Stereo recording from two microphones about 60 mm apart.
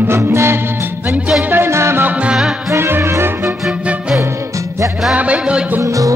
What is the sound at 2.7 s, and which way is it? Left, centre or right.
Music, right.